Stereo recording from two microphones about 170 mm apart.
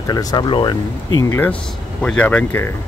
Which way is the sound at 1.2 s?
15° left (ahead or behind).